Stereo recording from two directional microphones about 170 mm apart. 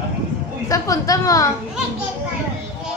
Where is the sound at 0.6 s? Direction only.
20° left (ahead or behind).